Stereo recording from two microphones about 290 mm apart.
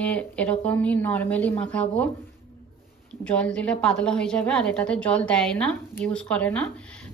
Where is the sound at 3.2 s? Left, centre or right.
Centre.